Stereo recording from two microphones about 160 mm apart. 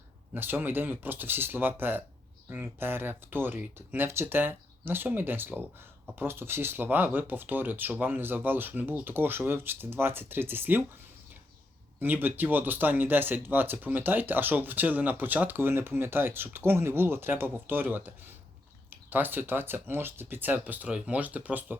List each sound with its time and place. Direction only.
0.3 s speech: 10° right (ahead or behind)
11.9 s speech: 10° right (ahead or behind)